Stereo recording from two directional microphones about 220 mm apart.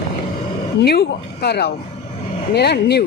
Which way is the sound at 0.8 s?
45° left (ahead or behind).